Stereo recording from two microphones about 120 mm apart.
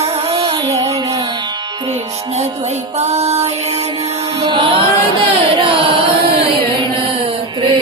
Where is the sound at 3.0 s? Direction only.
60° right (ahead or behind).